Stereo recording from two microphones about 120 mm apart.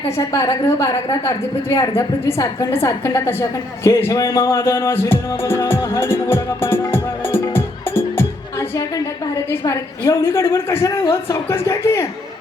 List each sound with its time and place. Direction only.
0.3 s speech: 35° left (ahead or behind)
7.3 s music: 20° left (ahead or behind)
10.1 s speech: 25° left (ahead or behind)